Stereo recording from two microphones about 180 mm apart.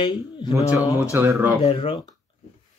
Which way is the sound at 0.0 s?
25° left (ahead or behind).